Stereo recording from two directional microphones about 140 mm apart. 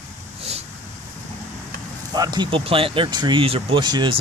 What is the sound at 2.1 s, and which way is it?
Speech, 30° right (ahead or behind).